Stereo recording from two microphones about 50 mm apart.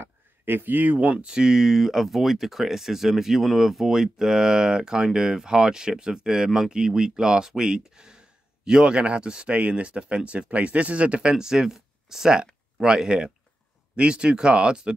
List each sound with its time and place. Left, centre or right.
0.0 s speech: right
1.4 s speech: centre